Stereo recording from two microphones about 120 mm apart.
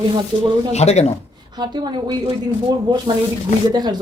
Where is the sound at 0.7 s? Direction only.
65° left (ahead or behind).